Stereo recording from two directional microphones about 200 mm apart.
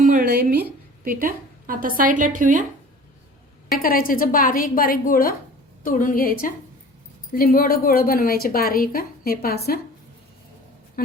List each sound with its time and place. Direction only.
0.0 s a woman's voice: 45° right (ahead or behind)
3.8 s a woman's voice: 45° left (ahead or behind)